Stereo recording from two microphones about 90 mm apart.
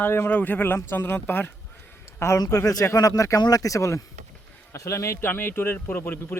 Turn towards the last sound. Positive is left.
turn(degrees=25)  # may be behind; listen again after turning